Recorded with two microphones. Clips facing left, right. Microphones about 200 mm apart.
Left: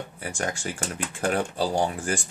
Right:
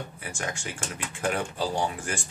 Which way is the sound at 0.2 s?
40° left (ahead or behind).